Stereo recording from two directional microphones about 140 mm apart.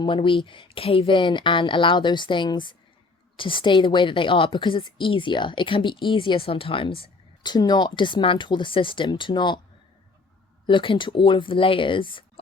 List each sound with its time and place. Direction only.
0.0 s a woman's voice: 35° left (ahead or behind)
10.7 s a woman's voice: 35° left (ahead or behind)